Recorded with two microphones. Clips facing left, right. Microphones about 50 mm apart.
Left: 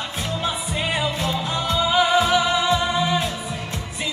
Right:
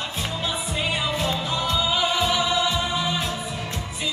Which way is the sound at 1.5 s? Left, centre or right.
Left.